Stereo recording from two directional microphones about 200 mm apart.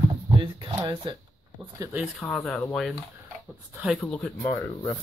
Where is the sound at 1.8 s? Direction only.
5° right (ahead or behind).